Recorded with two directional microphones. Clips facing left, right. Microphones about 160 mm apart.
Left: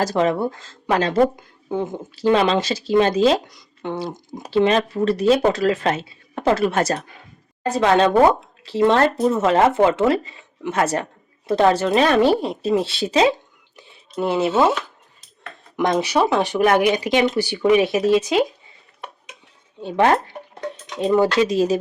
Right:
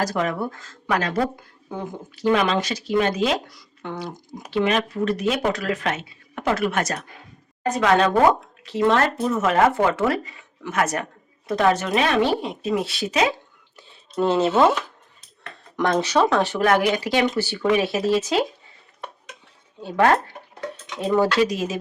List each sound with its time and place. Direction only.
0.0 s speech: 25° left (ahead or behind)
13.7 s speech: 10° left (ahead or behind)
19.8 s speech: 20° left (ahead or behind)